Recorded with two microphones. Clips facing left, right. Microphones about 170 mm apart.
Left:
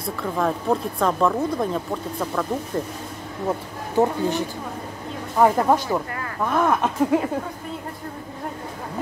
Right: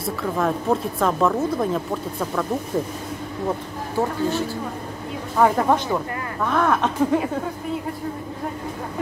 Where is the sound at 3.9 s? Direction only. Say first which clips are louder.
Left 2 dB; 15° left (ahead or behind).